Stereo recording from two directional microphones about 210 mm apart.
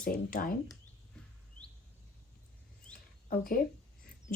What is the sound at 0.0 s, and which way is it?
Speech, 40° left (ahead or behind).